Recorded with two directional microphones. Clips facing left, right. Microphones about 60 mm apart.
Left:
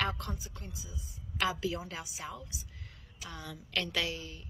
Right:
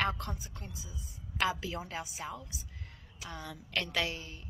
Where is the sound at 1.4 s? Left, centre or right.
Right.